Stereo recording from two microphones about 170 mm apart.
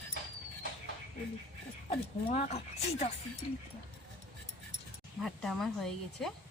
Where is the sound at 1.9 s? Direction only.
40° left (ahead or behind).